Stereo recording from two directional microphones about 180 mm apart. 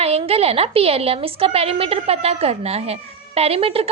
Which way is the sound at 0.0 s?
35° right (ahead or behind).